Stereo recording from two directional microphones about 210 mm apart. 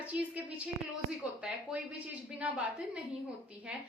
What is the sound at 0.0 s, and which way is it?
A woman's voice, 5° right (ahead or behind).